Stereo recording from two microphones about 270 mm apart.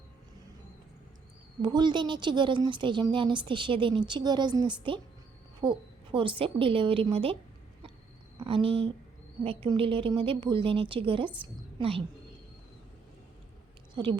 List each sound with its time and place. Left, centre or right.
1.6 s a woman's voice: centre
8.4 s a woman's voice: centre
13.9 s speech: centre